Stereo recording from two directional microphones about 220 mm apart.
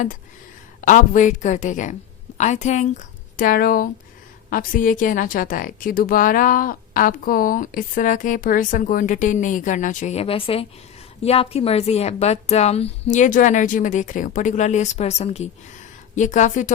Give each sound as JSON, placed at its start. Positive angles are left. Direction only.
{"t": 0.8, "sound": "a woman's voice", "side_deg": 35}